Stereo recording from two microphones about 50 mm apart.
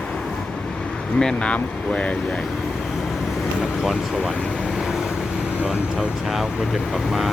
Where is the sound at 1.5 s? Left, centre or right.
Left.